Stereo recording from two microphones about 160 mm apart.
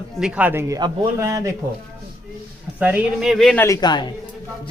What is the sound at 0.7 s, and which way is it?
Speech, 20° right (ahead or behind).